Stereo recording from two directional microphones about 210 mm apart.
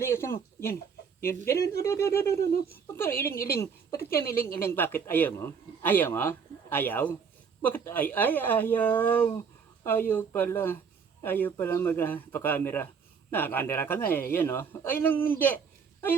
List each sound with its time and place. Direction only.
0.0 s a woman's voice: 10° left (ahead or behind)